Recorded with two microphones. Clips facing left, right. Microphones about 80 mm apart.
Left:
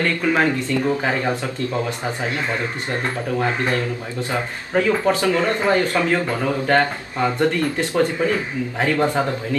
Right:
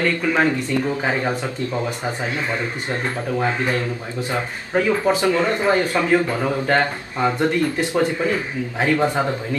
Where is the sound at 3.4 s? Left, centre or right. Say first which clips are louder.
Even; centre.